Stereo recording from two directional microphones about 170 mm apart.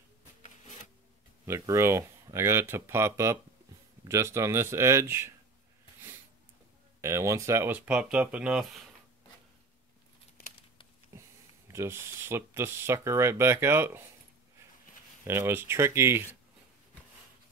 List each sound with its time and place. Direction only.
1.4 s speech: 15° right (ahead or behind)
7.0 s speech: 15° right (ahead or behind)
11.1 s a sound: 20° right (ahead or behind)
11.7 s speech: 15° right (ahead or behind)
15.2 s speech: 15° right (ahead or behind)